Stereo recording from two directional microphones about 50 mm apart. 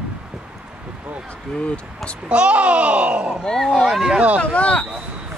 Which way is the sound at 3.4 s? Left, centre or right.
Centre.